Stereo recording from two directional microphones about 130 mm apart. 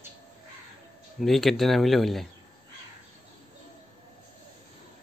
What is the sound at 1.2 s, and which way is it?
Speech, centre (ahead or behind).